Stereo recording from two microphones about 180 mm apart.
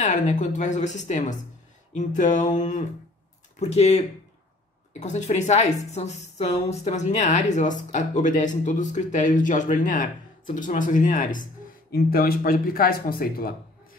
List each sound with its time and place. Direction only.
0.0 s speech: 45° left (ahead or behind)
5.0 s speech: 40° left (ahead or behind)
11.9 s speech: 55° left (ahead or behind)